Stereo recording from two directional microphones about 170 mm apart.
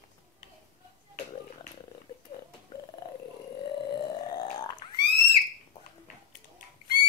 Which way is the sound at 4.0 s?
25° left (ahead or behind).